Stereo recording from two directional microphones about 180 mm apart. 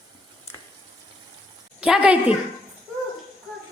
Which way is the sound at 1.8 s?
5° right (ahead or behind).